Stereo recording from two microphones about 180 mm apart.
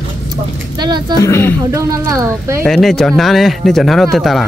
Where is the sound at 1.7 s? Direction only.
20° right (ahead or behind).